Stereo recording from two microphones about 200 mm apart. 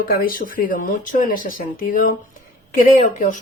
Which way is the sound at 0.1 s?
45° left (ahead or behind).